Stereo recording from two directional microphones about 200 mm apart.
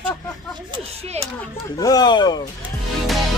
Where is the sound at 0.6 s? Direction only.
25° right (ahead or behind).